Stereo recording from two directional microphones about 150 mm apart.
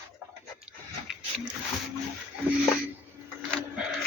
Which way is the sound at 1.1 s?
5° right (ahead or behind).